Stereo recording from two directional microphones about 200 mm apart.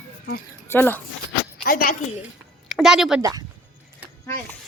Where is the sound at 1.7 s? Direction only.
45° left (ahead or behind).